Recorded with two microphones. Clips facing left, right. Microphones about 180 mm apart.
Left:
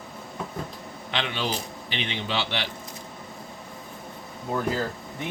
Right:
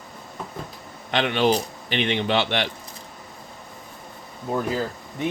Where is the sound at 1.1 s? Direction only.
55° right (ahead or behind).